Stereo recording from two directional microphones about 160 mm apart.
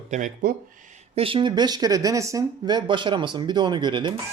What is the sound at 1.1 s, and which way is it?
Speech, 35° right (ahead or behind).